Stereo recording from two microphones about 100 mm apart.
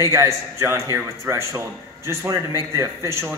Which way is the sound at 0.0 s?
30° right (ahead or behind).